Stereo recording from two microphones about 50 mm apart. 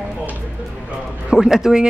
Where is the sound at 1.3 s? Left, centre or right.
Centre.